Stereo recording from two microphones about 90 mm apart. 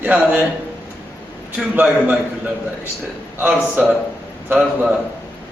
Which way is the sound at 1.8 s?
15° right (ahead or behind).